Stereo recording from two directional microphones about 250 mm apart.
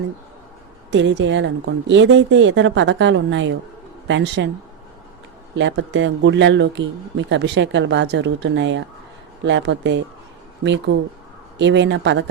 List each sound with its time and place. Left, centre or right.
0.9 s speech: right
5.5 s speech: right